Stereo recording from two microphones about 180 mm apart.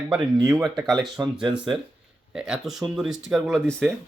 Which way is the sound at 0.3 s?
20° right (ahead or behind).